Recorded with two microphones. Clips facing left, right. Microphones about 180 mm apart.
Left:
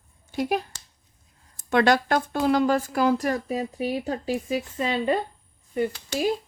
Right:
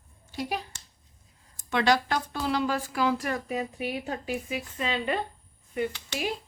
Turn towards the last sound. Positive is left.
turn(degrees=35)  # may be behind; listen again after turning